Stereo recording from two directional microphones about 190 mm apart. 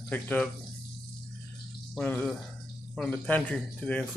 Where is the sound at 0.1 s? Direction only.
10° left (ahead or behind).